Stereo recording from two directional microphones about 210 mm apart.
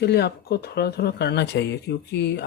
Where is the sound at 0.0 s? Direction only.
50° left (ahead or behind).